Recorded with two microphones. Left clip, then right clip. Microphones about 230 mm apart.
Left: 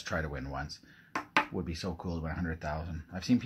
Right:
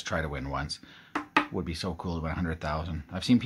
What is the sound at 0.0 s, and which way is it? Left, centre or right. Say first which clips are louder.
Speech: right 4 dB; centre.